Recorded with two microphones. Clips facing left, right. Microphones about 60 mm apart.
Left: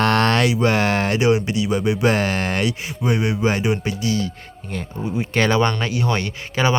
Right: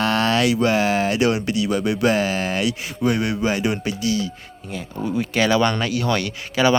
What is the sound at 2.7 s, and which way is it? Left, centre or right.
Speech, left.